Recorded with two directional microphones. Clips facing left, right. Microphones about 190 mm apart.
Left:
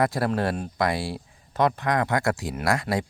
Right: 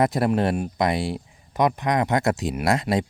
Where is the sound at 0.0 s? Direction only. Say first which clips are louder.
Right 3 dB; 20° right (ahead or behind).